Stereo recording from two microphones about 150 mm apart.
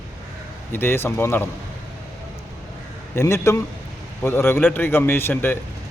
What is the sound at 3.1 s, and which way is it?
A man's voice, 20° left (ahead or behind).